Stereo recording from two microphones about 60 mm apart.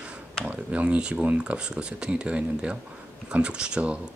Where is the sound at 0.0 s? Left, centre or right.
Centre.